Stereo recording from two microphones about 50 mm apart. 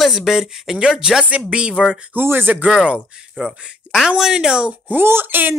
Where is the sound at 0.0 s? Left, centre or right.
Centre.